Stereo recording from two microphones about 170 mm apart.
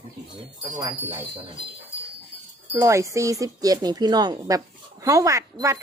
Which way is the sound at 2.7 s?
20° right (ahead or behind).